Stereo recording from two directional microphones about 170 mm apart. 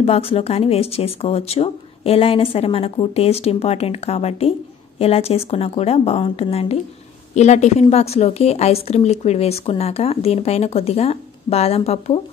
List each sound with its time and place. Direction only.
0.0 s speech: 35° left (ahead or behind)